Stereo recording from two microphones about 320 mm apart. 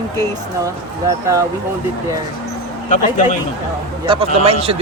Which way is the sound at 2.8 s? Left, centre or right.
Left.